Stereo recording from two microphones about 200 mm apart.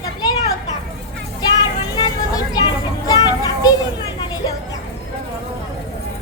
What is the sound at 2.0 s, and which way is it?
Vehicle, 20° left (ahead or behind).